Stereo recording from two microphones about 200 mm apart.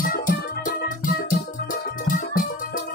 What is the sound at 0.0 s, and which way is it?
Music, 45° left (ahead or behind).